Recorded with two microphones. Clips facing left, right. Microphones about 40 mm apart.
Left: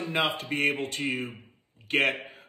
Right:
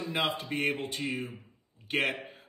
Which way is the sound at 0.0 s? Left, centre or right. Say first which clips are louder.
Left 3 dB; left.